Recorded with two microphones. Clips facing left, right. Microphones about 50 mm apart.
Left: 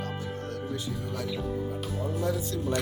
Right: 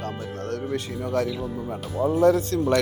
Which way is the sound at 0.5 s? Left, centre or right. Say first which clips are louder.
Right 9 dB; right.